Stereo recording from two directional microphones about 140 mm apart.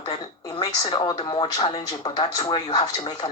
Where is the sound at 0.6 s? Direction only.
45° left (ahead or behind).